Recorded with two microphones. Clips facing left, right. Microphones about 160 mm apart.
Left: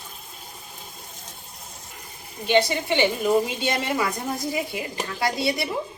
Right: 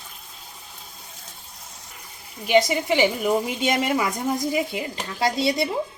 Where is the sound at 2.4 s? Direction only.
10° right (ahead or behind).